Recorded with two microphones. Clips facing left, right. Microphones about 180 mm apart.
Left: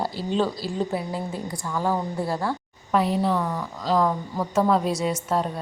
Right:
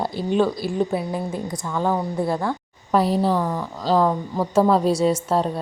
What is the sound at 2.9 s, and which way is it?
A woman's voice, 35° right (ahead or behind).